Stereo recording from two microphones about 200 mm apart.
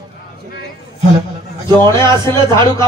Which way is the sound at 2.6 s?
20° right (ahead or behind).